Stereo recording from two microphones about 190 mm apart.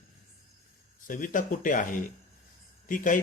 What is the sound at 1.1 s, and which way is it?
A man's voice, 45° left (ahead or behind).